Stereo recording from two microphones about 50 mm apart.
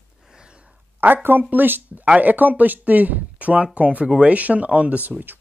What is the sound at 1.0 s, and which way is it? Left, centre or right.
Speech, right.